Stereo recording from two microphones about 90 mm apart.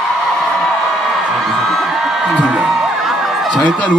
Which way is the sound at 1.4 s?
5° left (ahead or behind).